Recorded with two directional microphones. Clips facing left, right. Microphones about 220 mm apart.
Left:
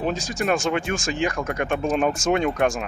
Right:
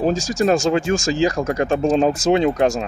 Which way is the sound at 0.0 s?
35° right (ahead or behind).